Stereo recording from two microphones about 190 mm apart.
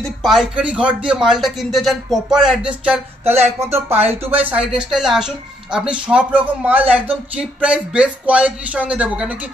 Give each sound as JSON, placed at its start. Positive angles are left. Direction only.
{"t": 0.2, "sound": "speech", "side_deg": 0}